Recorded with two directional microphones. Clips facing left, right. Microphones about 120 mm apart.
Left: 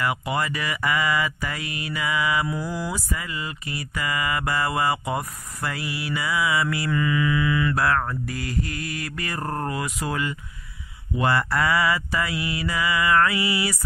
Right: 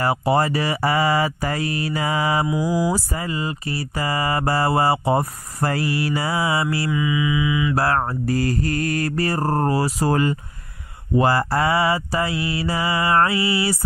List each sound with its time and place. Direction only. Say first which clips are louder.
0.0 s speech: right 6 dB; 35° right (ahead or behind)
2.5 s mantra: right 8 dB; 10° right (ahead or behind)
2.9 s speech: right 6 dB; 35° right (ahead or behind)
6.9 s mantra: right 1 dB; 10° right (ahead or behind)
7.7 s speech: right 3 dB; 35° right (ahead or behind)